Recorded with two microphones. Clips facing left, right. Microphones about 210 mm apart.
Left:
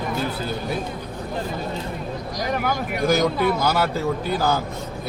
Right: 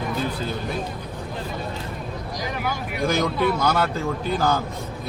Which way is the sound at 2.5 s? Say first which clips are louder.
Left 4 dB; 50° left (ahead or behind).